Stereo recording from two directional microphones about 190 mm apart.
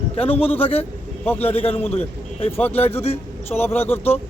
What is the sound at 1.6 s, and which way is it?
Speech, 30° left (ahead or behind).